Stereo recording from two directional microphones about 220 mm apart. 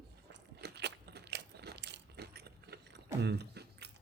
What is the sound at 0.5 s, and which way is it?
Crunch, 50° right (ahead or behind).